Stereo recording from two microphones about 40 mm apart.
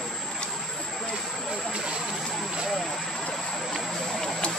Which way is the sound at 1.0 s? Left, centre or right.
Centre.